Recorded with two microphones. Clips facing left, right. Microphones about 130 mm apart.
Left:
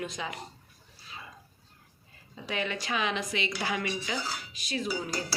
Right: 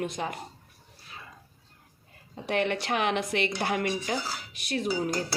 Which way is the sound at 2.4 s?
60° right (ahead or behind).